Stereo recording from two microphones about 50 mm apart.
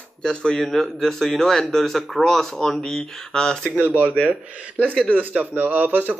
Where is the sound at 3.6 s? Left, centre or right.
Right.